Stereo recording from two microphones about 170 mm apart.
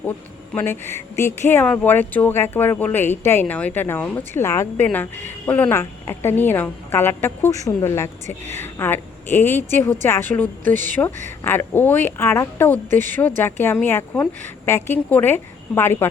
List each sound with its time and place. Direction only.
0.5 s a woman's voice: 15° left (ahead or behind)